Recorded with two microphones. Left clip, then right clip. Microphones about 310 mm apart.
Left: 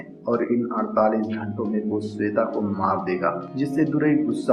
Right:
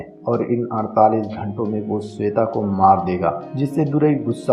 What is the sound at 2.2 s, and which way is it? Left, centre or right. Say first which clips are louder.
Speech: right 4 dB; right.